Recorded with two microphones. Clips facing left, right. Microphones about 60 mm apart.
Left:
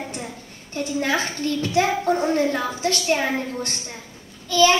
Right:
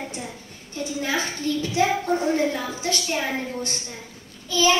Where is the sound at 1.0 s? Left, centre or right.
Left.